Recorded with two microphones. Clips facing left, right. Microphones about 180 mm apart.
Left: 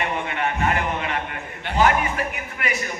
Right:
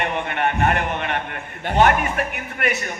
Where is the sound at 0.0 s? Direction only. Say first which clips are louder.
Right 2 dB; 55° right (ahead or behind).